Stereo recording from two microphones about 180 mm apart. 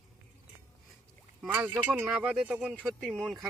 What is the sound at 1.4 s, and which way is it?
Speech, 5° right (ahead or behind).